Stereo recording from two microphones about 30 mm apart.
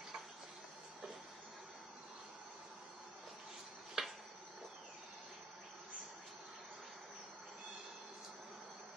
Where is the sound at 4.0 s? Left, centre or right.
Centre.